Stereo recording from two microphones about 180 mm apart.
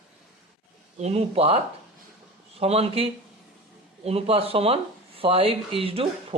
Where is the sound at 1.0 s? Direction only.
35° right (ahead or behind).